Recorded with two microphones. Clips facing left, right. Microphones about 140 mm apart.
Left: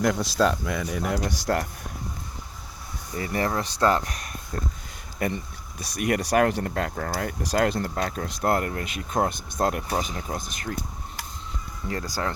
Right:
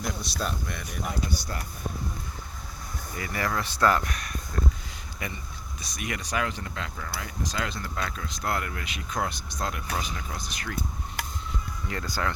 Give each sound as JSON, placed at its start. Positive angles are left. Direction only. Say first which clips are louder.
{"t": 0.0, "sound": "speech", "louder": "left 10 dB", "side_deg": 90}
{"t": 1.0, "sound": "speech", "louder": "left 4 dB", "side_deg": 80}
{"t": 3.2, "sound": "speech", "louder": "left 4 dB", "side_deg": 30}
{"t": 4.5, "sound": "a sound", "louder": "right 1 dB", "side_deg": 35}
{"t": 5.2, "sound": "speech", "louder": "left 10 dB", "side_deg": 50}
{"t": 8.5, "sound": "speech", "louder": "left 6 dB", "side_deg": 40}
{"t": 9.9, "sound": "speech", "louder": "left 5 dB", "side_deg": 35}
{"t": 11.9, "sound": "speech", "louder": "left 2 dB", "side_deg": 35}